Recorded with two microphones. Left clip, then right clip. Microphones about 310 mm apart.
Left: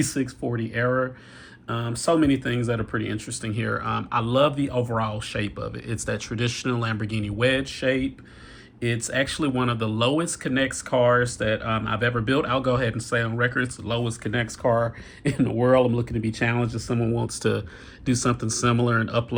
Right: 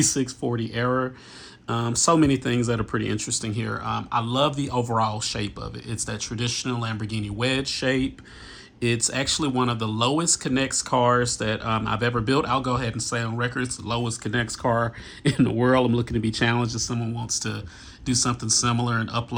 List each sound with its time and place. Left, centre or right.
0.0 s speech: centre